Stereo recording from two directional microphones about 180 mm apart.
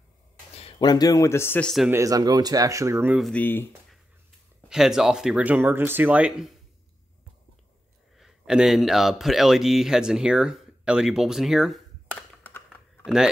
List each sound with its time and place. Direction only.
0.6 s speech: 30° left (ahead or behind); by 1.7 s 15° left (ahead or behind)
1.9 s speech: 20° right (ahead or behind)
3.2 s speech: centre (ahead or behind)
4.6 s speech: 5° right (ahead or behind)
8.2 s speech: 5° right (ahead or behind)
12.6 s typing: 5° right (ahead or behind)